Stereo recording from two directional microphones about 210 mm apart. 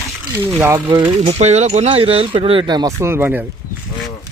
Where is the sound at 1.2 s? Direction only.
30° right (ahead or behind); by 3.5 s 10° right (ahead or behind).